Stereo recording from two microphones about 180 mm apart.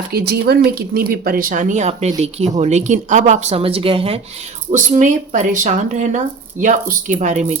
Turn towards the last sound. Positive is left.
turn(degrees=-40)  # may be behind; listen again after turning